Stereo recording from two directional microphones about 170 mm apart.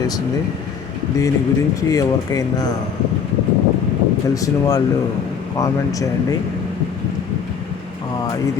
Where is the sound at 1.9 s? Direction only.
20° left (ahead or behind).